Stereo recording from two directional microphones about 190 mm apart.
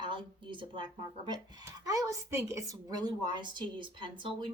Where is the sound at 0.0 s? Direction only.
25° right (ahead or behind).